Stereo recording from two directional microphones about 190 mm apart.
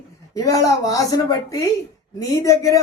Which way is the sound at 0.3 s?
20° left (ahead or behind).